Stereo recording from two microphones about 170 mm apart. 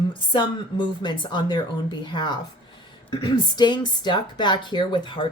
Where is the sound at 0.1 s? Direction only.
30° left (ahead or behind).